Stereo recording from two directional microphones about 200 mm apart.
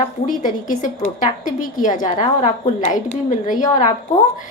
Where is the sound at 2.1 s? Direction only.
35° left (ahead or behind).